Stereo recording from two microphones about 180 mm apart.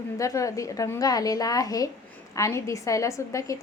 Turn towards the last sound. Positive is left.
turn(degrees=20)  # may be behind; listen again after turning